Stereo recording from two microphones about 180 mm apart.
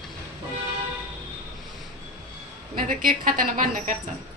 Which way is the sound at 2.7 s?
50° right (ahead or behind).